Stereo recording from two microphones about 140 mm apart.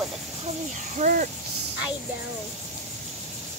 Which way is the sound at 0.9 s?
65° right (ahead or behind).